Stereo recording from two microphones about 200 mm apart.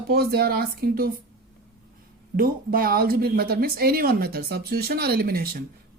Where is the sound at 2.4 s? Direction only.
45° right (ahead or behind).